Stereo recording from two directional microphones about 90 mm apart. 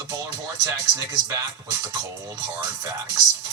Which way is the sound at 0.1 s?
40° right (ahead or behind).